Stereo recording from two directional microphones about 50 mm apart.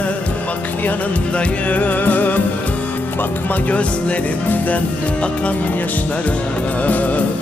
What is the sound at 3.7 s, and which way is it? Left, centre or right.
Music, left.